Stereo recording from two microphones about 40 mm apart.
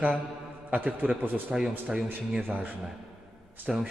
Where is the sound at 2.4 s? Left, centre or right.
Right.